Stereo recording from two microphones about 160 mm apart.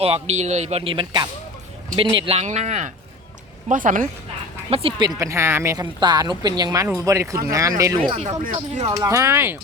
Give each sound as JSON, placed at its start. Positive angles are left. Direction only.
{"t": 0.0, "sound": "speech", "side_deg": -40}
{"t": 4.7, "sound": "a woman's voice", "side_deg": -35}
{"t": 7.9, "sound": "speech", "side_deg": -35}
{"t": 8.9, "sound": "speech", "side_deg": -20}